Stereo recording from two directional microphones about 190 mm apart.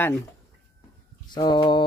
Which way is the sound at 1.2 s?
25° left (ahead or behind).